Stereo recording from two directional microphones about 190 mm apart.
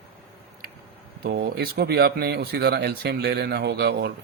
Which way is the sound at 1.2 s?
55° right (ahead or behind).